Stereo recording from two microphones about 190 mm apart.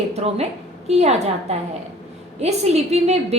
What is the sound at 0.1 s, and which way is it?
A woman's voice, 35° right (ahead or behind).